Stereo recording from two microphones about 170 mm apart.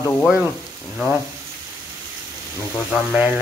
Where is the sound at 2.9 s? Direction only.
10° right (ahead or behind).